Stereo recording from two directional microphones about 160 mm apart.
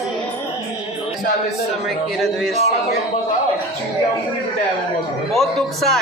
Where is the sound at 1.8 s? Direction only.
Centre (ahead or behind).